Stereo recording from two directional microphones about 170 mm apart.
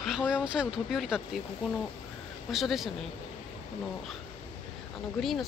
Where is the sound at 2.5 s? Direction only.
Centre (ahead or behind).